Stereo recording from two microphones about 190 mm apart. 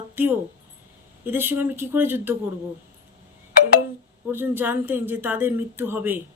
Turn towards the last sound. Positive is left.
turn(degrees=-10)  # may be behind; listen again after turning